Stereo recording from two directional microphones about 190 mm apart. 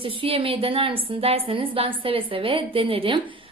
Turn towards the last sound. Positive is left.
turn(degrees=-30)  # may be behind; listen again after turning